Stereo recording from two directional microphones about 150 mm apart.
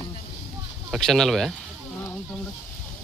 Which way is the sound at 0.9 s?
5° left (ahead or behind).